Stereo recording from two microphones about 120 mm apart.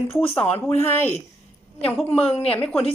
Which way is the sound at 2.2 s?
60° left (ahead or behind).